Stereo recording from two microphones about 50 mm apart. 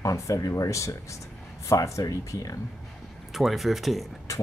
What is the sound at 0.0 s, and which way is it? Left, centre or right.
Speech, left.